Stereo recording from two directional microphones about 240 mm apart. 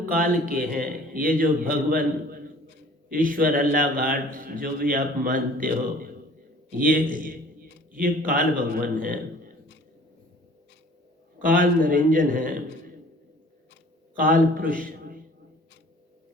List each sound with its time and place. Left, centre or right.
0.0 s a man's voice: right
11.3 s a man's voice: right
14.2 s a man's voice: right